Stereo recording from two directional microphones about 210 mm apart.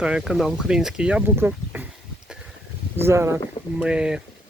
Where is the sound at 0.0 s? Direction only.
5° right (ahead or behind).